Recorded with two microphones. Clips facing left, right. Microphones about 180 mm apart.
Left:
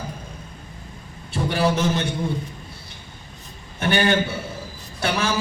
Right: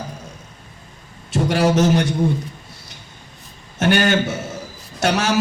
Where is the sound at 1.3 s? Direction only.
85° right.